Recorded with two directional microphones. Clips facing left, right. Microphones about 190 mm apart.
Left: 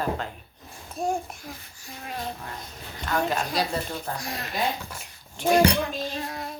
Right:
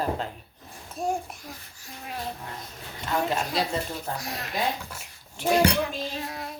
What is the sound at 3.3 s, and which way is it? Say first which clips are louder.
Speech: even; 25° right (ahead or behind).